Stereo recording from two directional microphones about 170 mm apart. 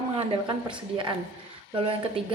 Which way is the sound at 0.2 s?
30° right (ahead or behind).